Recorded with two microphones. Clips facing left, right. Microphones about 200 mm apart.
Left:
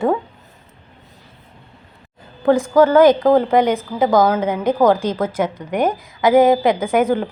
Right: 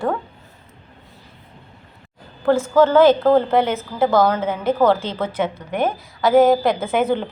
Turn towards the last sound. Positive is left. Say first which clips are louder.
# left 3 dB
turn(degrees=10)  # may be behind; listen again after turning